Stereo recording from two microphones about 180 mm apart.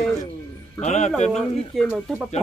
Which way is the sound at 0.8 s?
40° left (ahead or behind).